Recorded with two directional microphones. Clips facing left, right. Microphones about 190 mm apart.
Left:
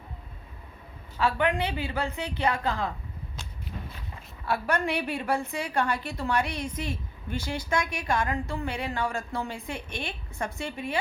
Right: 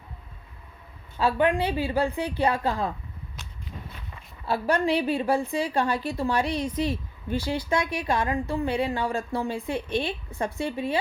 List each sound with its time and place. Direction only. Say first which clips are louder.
1.2 s a woman's voice: right 3 dB; 30° right (ahead or behind)
4.4 s a woman's voice: right 4 dB; 30° right (ahead or behind)